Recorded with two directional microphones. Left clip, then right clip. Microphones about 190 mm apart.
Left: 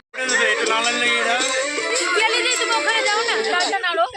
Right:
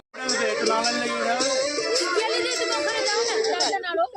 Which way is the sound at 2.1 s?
5° right (ahead or behind).